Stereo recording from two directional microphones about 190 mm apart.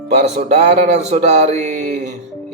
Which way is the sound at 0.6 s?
35° right (ahead or behind).